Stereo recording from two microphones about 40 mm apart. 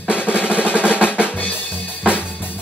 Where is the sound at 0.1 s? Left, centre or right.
Left.